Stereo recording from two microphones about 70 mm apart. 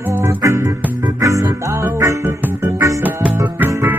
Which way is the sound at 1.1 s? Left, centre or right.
Right.